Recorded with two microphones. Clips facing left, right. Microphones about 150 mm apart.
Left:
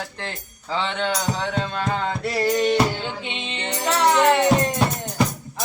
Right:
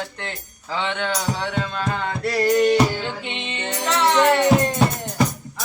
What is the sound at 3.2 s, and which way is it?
Speech, 20° left (ahead or behind).